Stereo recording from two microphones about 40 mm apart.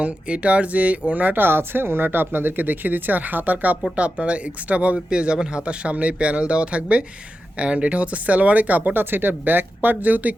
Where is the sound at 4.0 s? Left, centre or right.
Right.